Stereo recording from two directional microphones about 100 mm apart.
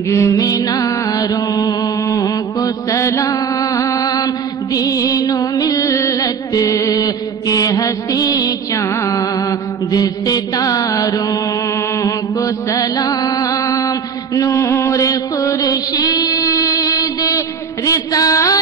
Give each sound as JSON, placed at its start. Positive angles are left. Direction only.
{"t": 0.1, "sound": "music", "side_deg": 30}
{"t": 6.1, "sound": "mantra", "side_deg": 40}
{"t": 17.8, "sound": "a sound", "side_deg": 35}